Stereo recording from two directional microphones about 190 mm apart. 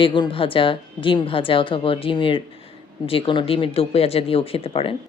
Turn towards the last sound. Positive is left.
turn(degrees=30)  # may be behind; listen again after turning